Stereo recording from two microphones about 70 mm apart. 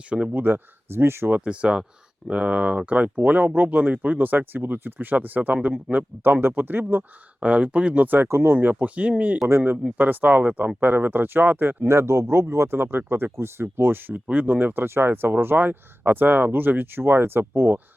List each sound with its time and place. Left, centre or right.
0.3 s speech: right
1.3 s speech: centre
8.7 s speech: centre
9.5 s speech: right